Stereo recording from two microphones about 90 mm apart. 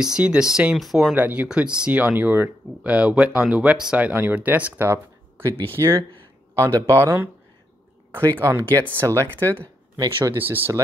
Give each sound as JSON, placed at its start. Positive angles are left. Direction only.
{"t": 0.0, "sound": "speech", "side_deg": -10}
{"t": 1.1, "sound": "speech", "side_deg": -20}
{"t": 4.1, "sound": "speech", "side_deg": -20}
{"t": 4.8, "sound": "a sound", "side_deg": -30}
{"t": 5.8, "sound": "speech", "side_deg": -40}
{"t": 8.3, "sound": "speech", "side_deg": -40}